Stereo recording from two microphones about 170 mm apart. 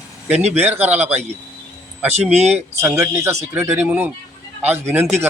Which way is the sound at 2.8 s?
15° right (ahead or behind).